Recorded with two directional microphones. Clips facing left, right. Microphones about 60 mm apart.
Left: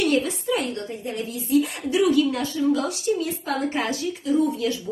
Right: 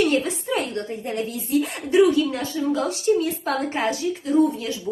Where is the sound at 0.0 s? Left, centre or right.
Right.